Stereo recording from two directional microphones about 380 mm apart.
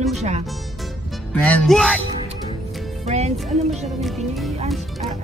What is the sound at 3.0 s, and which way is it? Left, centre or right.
Speech, centre.